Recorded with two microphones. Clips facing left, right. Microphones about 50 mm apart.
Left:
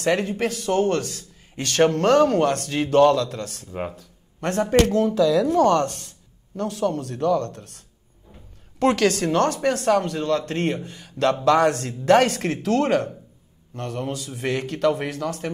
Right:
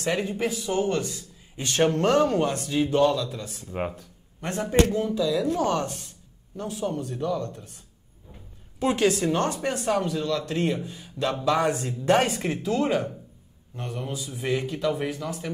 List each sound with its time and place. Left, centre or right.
0.0 s a man's voice: left
4.6 s a man's voice: left
5.9 s speech: centre
6.5 s a man's voice: left